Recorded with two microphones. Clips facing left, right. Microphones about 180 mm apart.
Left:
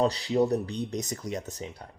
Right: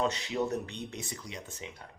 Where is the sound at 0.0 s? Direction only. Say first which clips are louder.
Left 6 dB; 35° left (ahead or behind).